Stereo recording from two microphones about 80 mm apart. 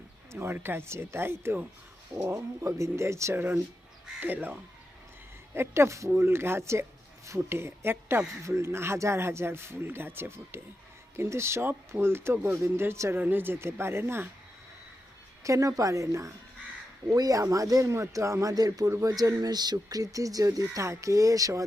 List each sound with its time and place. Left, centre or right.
0.3 s speech: right
4.2 s speech: right
5.5 s speech: right
15.4 s speech: right